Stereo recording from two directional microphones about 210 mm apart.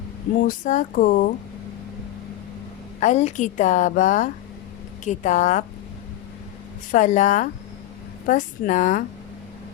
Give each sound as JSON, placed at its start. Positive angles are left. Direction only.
{"t": 0.4, "sound": "a woman's voice", "side_deg": 35}
{"t": 3.0, "sound": "a woman's voice", "side_deg": 35}
{"t": 6.9, "sound": "a woman's voice", "side_deg": 35}